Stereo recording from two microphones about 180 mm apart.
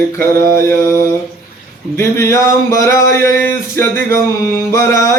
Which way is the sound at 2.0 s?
15° left (ahead or behind).